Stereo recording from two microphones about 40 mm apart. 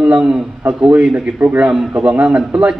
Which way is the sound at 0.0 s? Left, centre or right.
Right.